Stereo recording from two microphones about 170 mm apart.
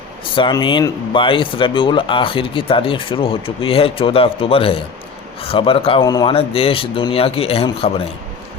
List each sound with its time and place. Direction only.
0.3 s speech: 30° left (ahead or behind)
6.3 s speech: 35° left (ahead or behind)